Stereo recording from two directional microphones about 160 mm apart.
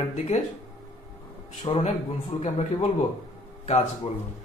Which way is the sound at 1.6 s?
40° left (ahead or behind).